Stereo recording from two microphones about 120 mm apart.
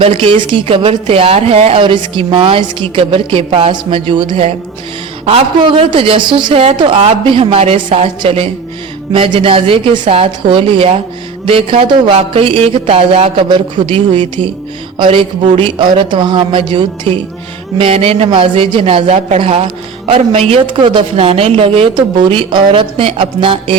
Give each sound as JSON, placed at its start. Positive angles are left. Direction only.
{"t": 0.0, "sound": "a man's voice", "side_deg": -50}
{"t": 1.8, "sound": "a man's voice", "side_deg": -45}
{"t": 17.7, "sound": "a man's voice", "side_deg": -55}